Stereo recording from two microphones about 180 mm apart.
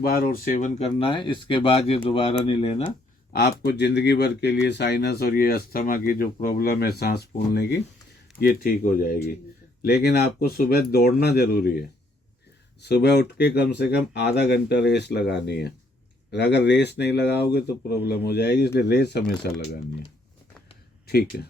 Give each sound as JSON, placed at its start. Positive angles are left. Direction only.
{"t": 0.0, "sound": "speech", "side_deg": 55}
{"t": 0.8, "sound": "speech", "side_deg": 30}
{"t": 3.3, "sound": "speech", "side_deg": 65}
{"t": 8.4, "sound": "speech", "side_deg": 55}
{"t": 12.8, "sound": "speech", "side_deg": 70}
{"t": 21.1, "sound": "speech", "side_deg": 60}